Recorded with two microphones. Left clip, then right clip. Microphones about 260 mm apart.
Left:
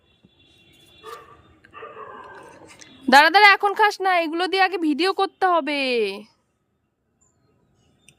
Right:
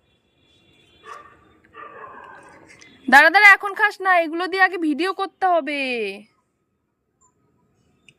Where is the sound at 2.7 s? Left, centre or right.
Centre.